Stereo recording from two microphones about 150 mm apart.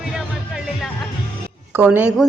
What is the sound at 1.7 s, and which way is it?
Speech, 10° right (ahead or behind).